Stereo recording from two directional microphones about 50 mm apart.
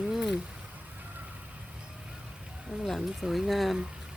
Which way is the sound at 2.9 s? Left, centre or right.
Centre.